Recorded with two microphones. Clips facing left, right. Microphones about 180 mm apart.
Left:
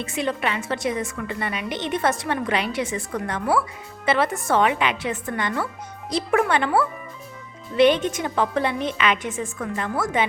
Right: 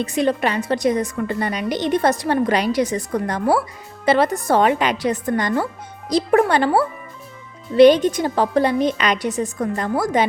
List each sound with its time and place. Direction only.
0.0 s a woman's voice: 35° right (ahead or behind)